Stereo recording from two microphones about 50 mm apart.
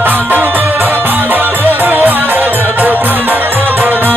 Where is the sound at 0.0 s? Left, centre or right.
Right.